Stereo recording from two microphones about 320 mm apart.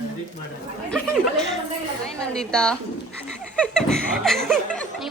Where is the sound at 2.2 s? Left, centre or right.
Centre.